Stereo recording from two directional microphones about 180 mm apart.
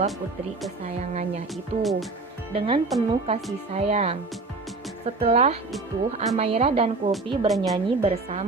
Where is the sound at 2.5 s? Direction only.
35° right (ahead or behind).